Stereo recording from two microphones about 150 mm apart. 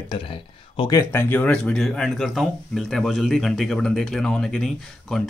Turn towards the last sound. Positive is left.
turn(degrees=5)  # may be behind; listen again after turning